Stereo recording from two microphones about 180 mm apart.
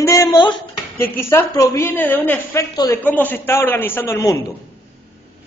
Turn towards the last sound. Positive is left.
turn(degrees=15)  # may be behind; listen again after turning